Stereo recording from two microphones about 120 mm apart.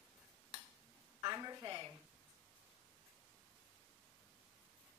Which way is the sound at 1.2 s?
30° right (ahead or behind).